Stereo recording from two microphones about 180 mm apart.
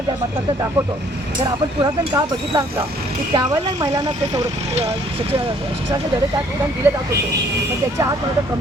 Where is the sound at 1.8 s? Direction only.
20° right (ahead or behind).